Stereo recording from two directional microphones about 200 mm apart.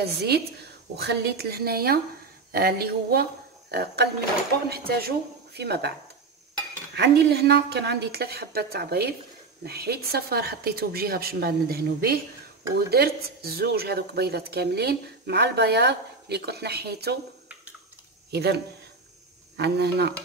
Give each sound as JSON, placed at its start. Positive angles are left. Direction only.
{"t": 0.0, "sound": "a woman's voice", "side_deg": -55}
{"t": 7.0, "sound": "a woman's voice", "side_deg": -55}
{"t": 18.3, "sound": "a woman's voice", "side_deg": -55}